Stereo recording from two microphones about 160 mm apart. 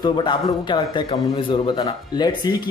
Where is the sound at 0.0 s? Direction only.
30° left (ahead or behind).